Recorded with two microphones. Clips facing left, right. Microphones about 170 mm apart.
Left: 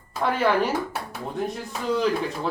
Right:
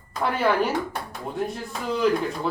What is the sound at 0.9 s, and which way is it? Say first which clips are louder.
Speech: even; 5° left (ahead or behind).